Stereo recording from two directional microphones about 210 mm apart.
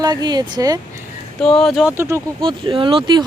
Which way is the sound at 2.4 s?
25° right (ahead or behind).